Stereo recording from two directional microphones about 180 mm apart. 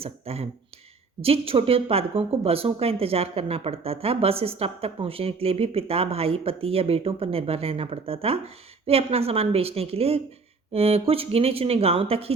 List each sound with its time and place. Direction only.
0.0 s speech: 35° right (ahead or behind)